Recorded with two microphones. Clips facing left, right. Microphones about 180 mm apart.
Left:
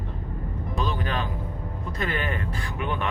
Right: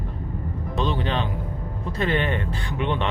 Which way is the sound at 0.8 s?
25° right (ahead or behind).